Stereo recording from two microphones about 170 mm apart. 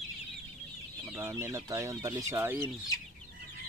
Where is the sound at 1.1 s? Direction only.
15° right (ahead or behind).